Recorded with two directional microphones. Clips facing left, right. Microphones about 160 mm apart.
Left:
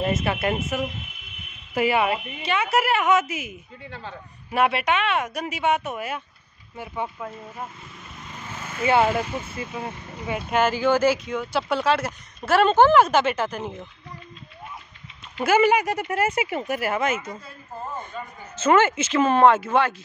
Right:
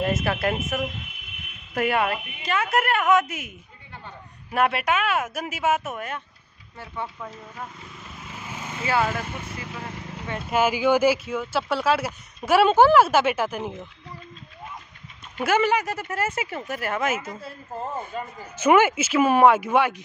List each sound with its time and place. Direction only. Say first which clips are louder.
0.0 s a woman's voice: even; centre (ahead or behind)
8.8 s speech: left 5 dB; 25° left (ahead or behind)
10.5 s speech: even; 10° right (ahead or behind)
15.6 s speech: left 3 dB; 15° left (ahead or behind)
17.0 s a woman's voice: left 1 dB; 5° right (ahead or behind)
18.6 s speech: right 1 dB; 10° right (ahead or behind)